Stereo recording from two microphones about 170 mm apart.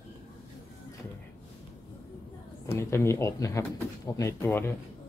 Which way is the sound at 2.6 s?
15° left (ahead or behind).